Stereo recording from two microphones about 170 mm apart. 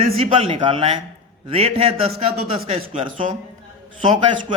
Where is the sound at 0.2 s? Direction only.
35° right (ahead or behind).